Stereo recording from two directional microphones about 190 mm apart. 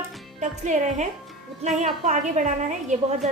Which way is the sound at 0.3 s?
40° right (ahead or behind).